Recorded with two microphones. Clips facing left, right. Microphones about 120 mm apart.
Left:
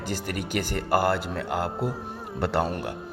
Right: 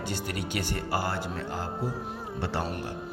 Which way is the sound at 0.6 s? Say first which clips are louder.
Left 7 dB; 55° left (ahead or behind).